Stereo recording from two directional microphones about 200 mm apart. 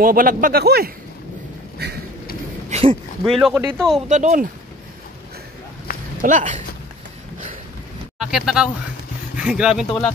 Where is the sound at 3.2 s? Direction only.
Centre (ahead or behind).